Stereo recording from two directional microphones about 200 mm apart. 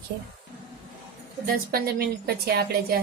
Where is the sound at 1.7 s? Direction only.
50° right (ahead or behind).